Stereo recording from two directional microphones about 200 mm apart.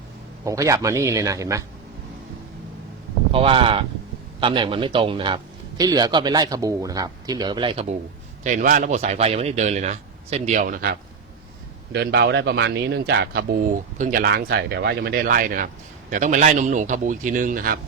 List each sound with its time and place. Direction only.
0.4 s a man's voice: 15° right (ahead or behind)
3.3 s a man's voice: 25° right (ahead or behind)
8.4 s speech: 40° right (ahead or behind)
11.9 s speech: 55° right (ahead or behind)